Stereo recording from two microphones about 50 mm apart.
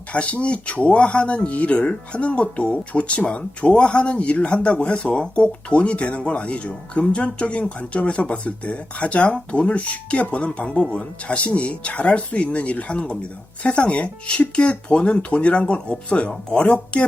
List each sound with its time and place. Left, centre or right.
0.1 s speech: left